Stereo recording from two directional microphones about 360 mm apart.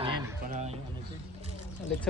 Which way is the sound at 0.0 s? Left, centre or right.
Centre.